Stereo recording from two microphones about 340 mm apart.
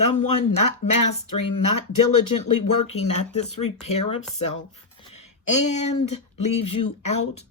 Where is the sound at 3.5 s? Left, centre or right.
Left.